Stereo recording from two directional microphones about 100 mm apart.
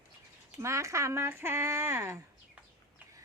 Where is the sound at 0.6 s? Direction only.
30° right (ahead or behind).